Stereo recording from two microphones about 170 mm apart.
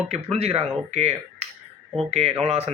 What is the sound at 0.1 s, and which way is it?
Speech, 35° right (ahead or behind).